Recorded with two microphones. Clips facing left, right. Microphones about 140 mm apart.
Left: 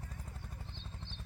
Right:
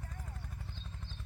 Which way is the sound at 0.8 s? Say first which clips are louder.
Even; 80° left.